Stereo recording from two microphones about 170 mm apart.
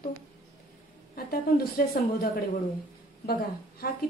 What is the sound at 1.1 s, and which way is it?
Speech, 60° left (ahead or behind).